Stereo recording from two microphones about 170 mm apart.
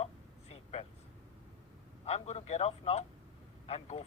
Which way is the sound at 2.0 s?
40° left (ahead or behind).